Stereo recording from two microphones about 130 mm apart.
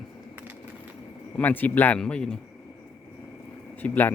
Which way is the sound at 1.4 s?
15° left (ahead or behind).